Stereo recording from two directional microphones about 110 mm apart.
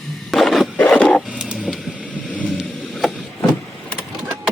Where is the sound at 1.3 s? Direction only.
10° right (ahead or behind).